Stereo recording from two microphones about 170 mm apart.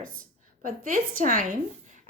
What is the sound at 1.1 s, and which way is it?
Speech, 55° right (ahead or behind).